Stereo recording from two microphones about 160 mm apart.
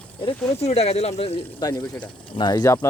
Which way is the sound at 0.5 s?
40° left (ahead or behind).